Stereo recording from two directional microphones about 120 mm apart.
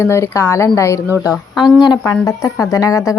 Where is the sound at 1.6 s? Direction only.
35° left (ahead or behind).